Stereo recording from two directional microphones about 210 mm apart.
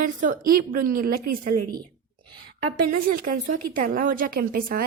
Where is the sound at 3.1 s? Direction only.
40° right (ahead or behind).